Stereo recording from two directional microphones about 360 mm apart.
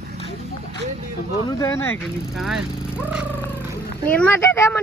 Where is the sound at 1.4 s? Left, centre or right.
Centre.